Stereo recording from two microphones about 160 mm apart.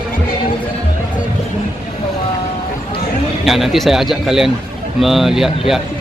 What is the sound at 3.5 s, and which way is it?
A man's voice, centre (ahead or behind).